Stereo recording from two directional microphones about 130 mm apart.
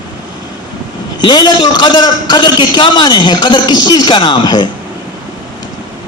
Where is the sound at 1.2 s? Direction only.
35° left (ahead or behind).